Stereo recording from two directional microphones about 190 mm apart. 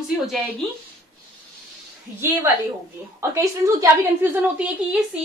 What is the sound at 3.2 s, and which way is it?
A woman's voice, 15° right (ahead or behind).